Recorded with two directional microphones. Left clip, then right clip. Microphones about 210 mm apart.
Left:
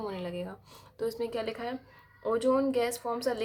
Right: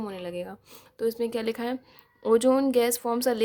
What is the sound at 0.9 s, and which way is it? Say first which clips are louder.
A woman's voice: right 5 dB; 35° right (ahead or behind).